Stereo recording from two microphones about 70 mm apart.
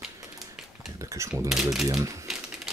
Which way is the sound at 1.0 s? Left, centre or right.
Right.